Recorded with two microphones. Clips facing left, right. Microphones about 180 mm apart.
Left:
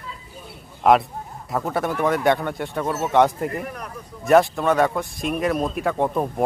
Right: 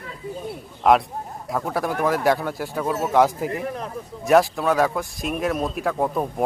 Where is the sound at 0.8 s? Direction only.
5° left (ahead or behind).